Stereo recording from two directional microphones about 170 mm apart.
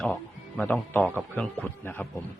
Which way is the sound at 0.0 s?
5° left (ahead or behind).